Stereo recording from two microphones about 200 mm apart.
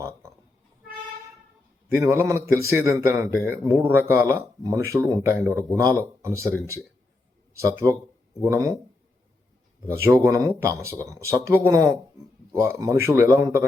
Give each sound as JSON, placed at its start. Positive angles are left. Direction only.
{"t": 2.0, "sound": "speech", "side_deg": -15}
{"t": 7.6, "sound": "speech", "side_deg": -15}
{"t": 10.2, "sound": "a man's voice", "side_deg": -15}